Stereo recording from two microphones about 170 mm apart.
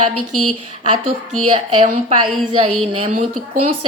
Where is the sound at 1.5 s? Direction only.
35° right (ahead or behind).